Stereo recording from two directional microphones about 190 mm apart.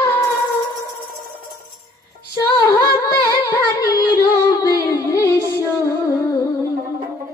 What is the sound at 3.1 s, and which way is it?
Music, 15° left (ahead or behind).